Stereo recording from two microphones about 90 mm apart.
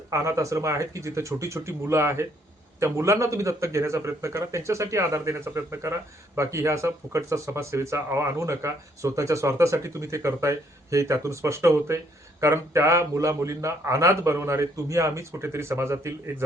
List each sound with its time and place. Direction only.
0.1 s speech: 35° right (ahead or behind)